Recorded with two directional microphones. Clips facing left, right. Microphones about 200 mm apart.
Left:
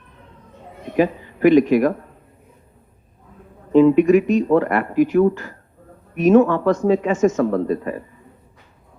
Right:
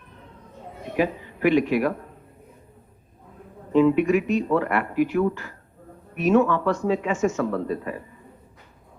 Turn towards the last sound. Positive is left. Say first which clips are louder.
# left 6 dB
turn(degrees=40)  # may be behind; listen again after turning